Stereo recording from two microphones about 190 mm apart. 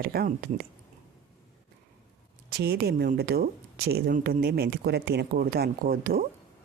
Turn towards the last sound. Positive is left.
turn(degrees=-50)  # may be behind; listen again after turning